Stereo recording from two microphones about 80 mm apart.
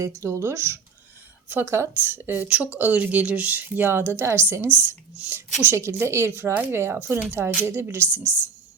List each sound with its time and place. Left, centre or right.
0.0 s speech: right